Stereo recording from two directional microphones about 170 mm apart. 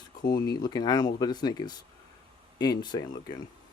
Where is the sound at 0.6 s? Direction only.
25° left (ahead or behind).